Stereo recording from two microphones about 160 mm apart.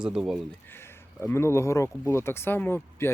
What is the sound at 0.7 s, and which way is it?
Speech, 15° left (ahead or behind).